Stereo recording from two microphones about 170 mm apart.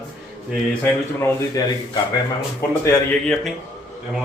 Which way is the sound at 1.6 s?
20° left (ahead or behind).